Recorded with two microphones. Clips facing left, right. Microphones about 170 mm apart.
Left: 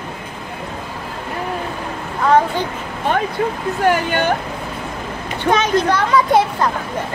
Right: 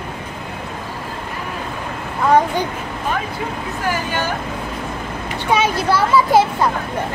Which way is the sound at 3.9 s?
65° left (ahead or behind).